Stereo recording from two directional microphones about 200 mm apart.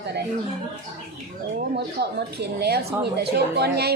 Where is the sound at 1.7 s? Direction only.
55° right (ahead or behind).